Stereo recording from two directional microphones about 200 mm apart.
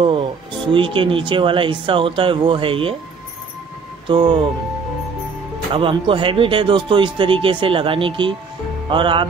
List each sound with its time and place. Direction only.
0.7 s speech: 25° right (ahead or behind)
4.1 s speech: 25° right (ahead or behind)
5.7 s speech: 25° right (ahead or behind)